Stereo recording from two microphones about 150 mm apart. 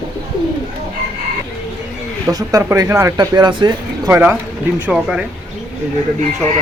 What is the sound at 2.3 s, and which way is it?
Speech, 25° right (ahead or behind).